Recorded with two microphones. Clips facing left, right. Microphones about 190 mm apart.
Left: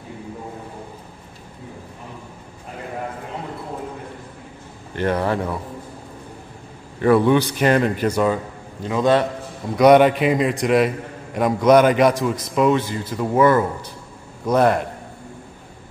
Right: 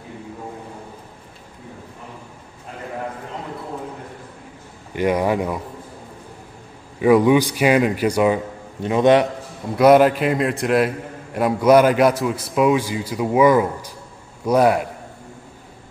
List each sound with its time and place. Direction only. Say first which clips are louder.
4.9 s a man's voice: right 2 dB; 10° right (ahead or behind)
7.0 s a man's voice: right 1 dB; 10° right (ahead or behind)
9.8 s a man's voice: even; centre (ahead or behind)